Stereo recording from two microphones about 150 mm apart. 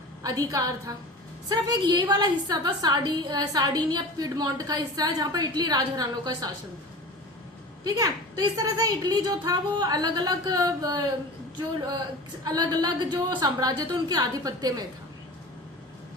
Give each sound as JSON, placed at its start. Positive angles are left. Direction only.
{"t": 0.2, "sound": "a woman's voice", "side_deg": -25}
{"t": 7.9, "sound": "a woman's voice", "side_deg": -25}
{"t": 12.5, "sound": "a woman's voice", "side_deg": -25}